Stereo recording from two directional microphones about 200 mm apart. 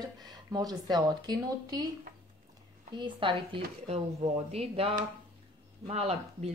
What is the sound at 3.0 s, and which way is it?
A woman's voice, 25° right (ahead or behind).